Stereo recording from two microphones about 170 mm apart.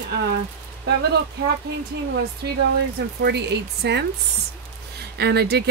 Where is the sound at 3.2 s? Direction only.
75° right (ahead or behind).